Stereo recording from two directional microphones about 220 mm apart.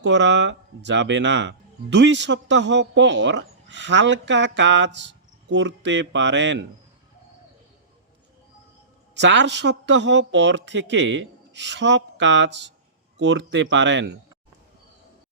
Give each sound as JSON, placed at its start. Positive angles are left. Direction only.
{"t": 0.0, "sound": "speech", "side_deg": -55}
{"t": 9.1, "sound": "speech", "side_deg": -55}